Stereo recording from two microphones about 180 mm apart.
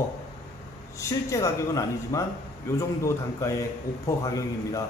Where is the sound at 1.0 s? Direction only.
15° left (ahead or behind).